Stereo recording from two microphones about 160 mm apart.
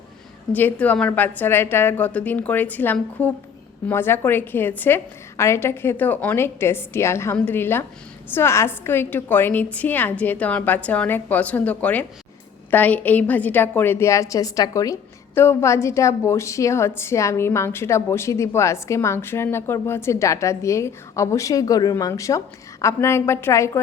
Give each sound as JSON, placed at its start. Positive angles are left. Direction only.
{"t": 0.5, "sound": "a woman's voice", "side_deg": 10}